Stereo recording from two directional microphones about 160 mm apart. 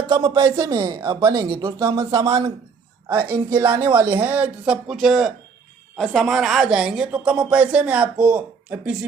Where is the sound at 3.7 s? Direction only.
15° right (ahead or behind).